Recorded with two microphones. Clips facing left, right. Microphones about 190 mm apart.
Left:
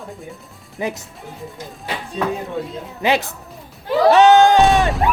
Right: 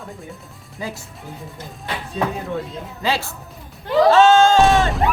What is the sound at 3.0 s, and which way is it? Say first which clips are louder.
Speech: left 4 dB; 20° left (ahead or behind).